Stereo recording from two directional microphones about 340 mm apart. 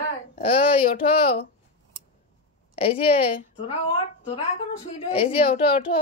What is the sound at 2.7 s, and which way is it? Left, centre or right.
A woman's voice, centre.